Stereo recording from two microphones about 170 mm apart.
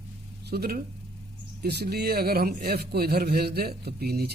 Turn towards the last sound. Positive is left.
turn(degrees=-65)  # may be behind; listen again after turning